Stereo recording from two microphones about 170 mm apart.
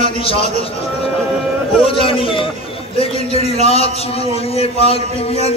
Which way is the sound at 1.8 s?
30° left (ahead or behind).